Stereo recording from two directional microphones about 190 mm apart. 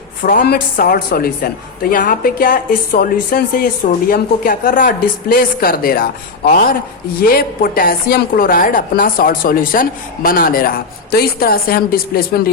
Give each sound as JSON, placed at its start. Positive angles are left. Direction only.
{"t": 0.2, "sound": "speech", "side_deg": 50}